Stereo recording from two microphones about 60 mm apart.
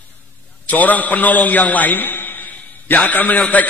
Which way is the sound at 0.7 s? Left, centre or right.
Left.